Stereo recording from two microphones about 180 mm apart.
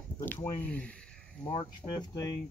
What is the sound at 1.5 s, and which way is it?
Speech, 25° left (ahead or behind).